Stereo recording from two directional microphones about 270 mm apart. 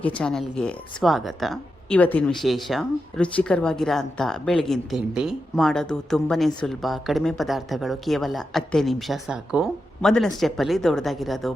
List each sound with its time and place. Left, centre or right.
0.2 s a woman's voice: centre